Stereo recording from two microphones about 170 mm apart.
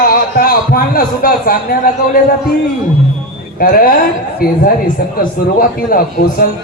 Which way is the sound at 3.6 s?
60° left (ahead or behind).